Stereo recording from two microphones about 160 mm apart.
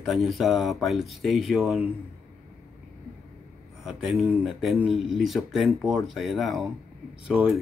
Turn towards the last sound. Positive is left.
turn(degrees=-5)  # may be behind; listen again after turning